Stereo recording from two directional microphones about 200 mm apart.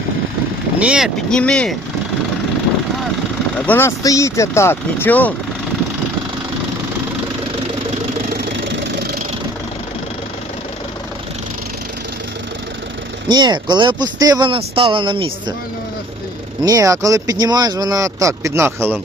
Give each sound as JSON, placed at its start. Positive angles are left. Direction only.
{"t": 0.8, "sound": "speech", "side_deg": -5}
{"t": 3.7, "sound": "speech", "side_deg": 10}
{"t": 13.2, "sound": "speech", "side_deg": -20}
{"t": 16.6, "sound": "speech", "side_deg": -15}